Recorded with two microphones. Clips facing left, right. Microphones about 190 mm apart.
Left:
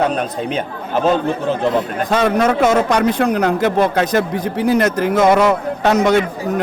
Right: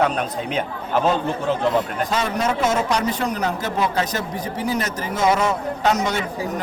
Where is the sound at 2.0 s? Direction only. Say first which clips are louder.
Left 7 dB; 55° left (ahead or behind).